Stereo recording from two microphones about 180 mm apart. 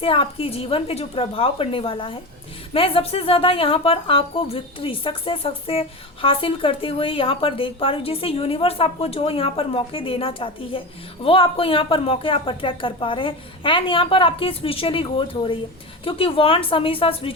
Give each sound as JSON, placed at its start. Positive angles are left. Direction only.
{"t": 0.0, "sound": "a woman's voice", "side_deg": 30}